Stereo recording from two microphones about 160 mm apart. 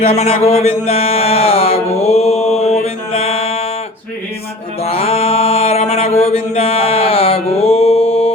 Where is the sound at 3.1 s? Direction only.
40° left (ahead or behind).